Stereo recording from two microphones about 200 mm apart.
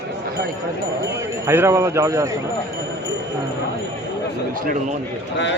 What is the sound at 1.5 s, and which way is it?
Speech, 15° right (ahead or behind).